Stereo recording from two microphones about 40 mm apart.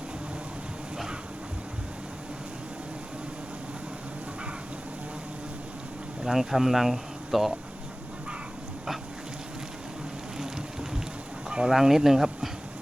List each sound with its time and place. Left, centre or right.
6.2 s speech: centre
11.4 s a sound: right
11.7 s speech: centre